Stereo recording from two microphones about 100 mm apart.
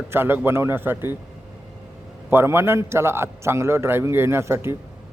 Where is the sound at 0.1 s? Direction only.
20° right (ahead or behind).